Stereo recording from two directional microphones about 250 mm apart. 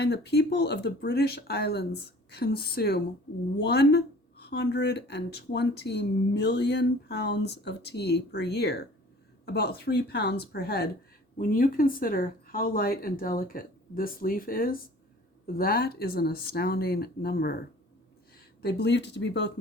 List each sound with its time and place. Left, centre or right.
0.0 s speech: left
18.6 s speech: left